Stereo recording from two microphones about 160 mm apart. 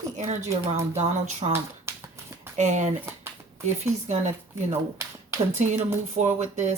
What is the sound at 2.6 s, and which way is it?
Speech, 45° right (ahead or behind).